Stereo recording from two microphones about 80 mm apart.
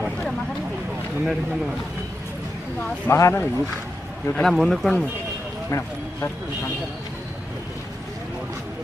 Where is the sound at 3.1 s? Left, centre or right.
Left.